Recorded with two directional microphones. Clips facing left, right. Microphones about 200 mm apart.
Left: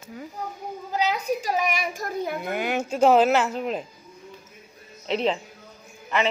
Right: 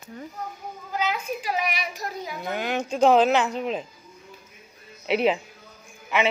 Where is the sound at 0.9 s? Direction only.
35° left (ahead or behind); by 2.5 s 55° left (ahead or behind).